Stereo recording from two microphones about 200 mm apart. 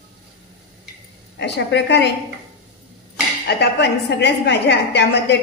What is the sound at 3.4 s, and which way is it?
A woman's voice, 55° left (ahead or behind).